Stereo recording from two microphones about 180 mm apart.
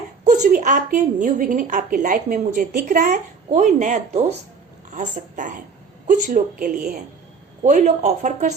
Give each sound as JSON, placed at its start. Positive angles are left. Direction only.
{"t": 0.3, "sound": "a woman's voice", "side_deg": -45}